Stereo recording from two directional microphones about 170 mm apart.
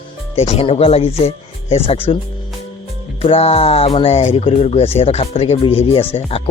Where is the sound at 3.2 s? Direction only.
35° left (ahead or behind).